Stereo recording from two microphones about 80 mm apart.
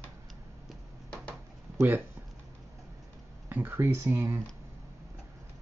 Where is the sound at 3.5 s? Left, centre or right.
Right.